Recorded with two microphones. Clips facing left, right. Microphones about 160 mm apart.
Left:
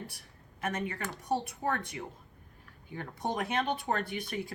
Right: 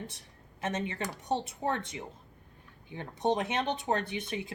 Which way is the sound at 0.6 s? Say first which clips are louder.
Right 1 dB; 25° right (ahead or behind).